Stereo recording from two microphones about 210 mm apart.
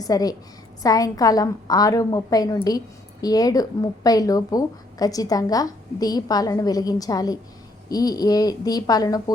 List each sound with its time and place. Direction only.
0.0 s a woman's voice: 15° left (ahead or behind)